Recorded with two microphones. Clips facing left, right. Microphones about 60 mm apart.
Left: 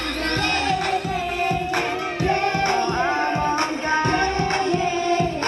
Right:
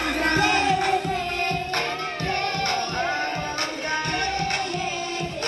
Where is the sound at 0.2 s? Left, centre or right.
Centre.